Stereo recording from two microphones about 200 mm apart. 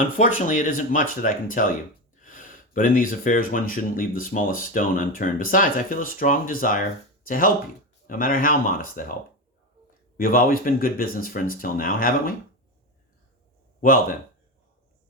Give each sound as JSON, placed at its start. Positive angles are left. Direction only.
{"t": 0.2, "sound": "speech", "side_deg": 40}
{"t": 10.2, "sound": "speech", "side_deg": 45}
{"t": 13.8, "sound": "speech", "side_deg": 45}